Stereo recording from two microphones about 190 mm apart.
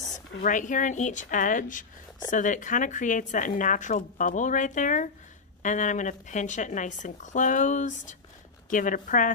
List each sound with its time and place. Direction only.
0.4 s a woman's voice: 40° left (ahead or behind)